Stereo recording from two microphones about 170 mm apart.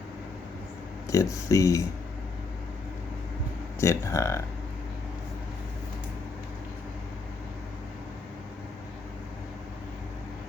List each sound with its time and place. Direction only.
1.0 s speech: 20° left (ahead or behind)
3.8 s speech: 15° left (ahead or behind)